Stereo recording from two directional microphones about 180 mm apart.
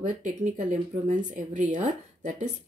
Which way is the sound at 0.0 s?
45° right (ahead or behind).